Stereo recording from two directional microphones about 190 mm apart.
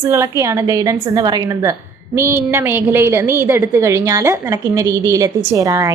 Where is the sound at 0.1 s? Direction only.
15° right (ahead or behind).